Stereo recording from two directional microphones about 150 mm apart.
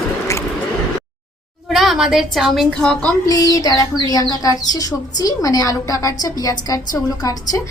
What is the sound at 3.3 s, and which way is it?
A woman's voice, 25° left (ahead or behind).